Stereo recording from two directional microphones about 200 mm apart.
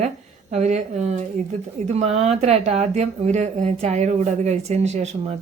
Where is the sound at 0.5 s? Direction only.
35° right (ahead or behind).